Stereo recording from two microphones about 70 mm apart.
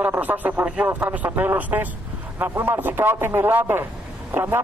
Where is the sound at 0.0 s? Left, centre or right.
Right.